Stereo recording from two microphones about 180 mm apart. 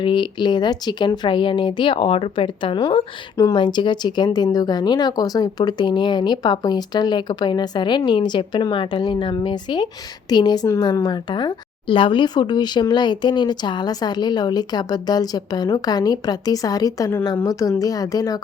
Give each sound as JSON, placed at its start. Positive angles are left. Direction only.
{"t": 0.0, "sound": "speech", "side_deg": 25}